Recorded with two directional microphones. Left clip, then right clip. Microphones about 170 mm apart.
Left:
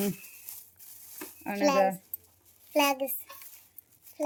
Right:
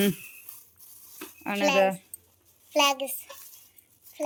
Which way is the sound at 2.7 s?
45° left (ahead or behind).